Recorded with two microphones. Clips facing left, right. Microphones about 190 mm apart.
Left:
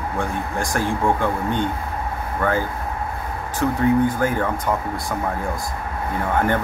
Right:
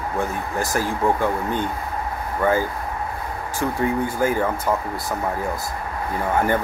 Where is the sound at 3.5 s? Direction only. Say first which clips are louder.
Left 4 dB; 10° right (ahead or behind).